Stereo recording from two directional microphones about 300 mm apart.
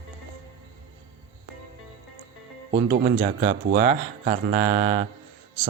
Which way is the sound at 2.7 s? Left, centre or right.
Right.